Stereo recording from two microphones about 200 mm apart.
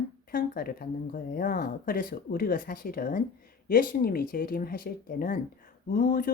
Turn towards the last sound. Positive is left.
turn(degrees=45)  # may be behind; listen again after turning